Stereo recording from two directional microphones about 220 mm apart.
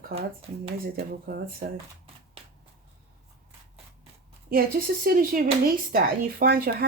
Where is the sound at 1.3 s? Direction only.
40° right (ahead or behind).